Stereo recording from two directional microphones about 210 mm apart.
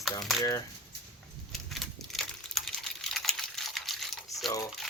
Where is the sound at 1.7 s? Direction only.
Centre (ahead or behind).